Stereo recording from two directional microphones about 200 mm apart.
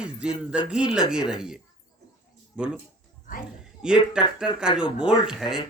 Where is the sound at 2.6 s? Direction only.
5° right (ahead or behind).